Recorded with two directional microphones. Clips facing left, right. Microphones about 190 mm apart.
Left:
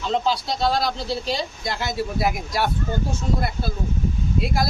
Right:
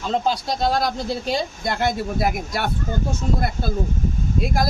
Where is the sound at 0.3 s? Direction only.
45° right (ahead or behind).